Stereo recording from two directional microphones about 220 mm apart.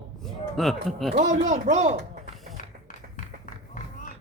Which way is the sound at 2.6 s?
35° left (ahead or behind).